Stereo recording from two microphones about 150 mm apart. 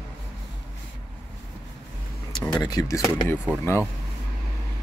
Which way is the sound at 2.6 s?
25° left (ahead or behind).